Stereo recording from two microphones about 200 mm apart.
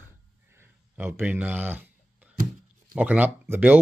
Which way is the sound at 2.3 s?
45° right (ahead or behind).